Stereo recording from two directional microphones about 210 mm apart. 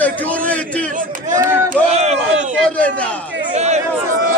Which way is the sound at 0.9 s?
40° right (ahead or behind).